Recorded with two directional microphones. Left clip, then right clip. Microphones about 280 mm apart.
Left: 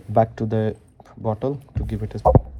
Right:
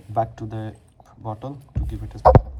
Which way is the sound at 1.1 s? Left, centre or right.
Left.